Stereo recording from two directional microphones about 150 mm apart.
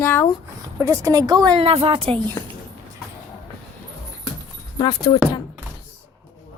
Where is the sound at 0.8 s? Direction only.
20° right (ahead or behind).